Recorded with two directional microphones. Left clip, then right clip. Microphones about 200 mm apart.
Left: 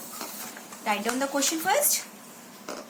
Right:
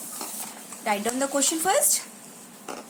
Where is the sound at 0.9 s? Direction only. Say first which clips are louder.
Right 1 dB; 30° right (ahead or behind).